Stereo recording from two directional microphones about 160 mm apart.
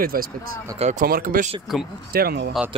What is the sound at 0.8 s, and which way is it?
Speech, 45° right (ahead or behind).